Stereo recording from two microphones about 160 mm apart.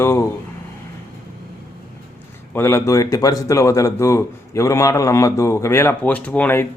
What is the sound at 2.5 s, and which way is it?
Speech, 15° left (ahead or behind).